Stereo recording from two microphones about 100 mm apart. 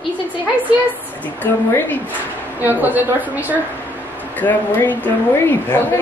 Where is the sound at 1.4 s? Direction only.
20° left (ahead or behind).